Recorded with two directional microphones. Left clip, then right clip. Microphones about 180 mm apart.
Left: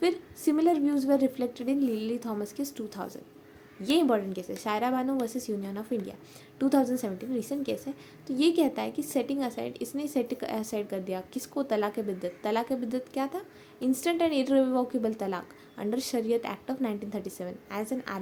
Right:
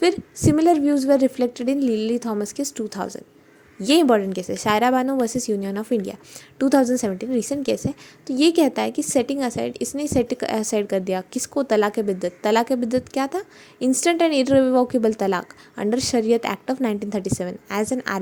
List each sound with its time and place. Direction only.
0.0 s a woman's voice: 40° right (ahead or behind)